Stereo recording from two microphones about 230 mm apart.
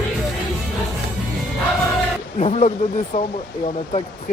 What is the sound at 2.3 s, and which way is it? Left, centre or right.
Speech, left.